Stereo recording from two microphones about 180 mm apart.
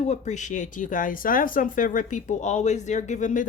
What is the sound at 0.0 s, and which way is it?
Speech, 40° left (ahead or behind).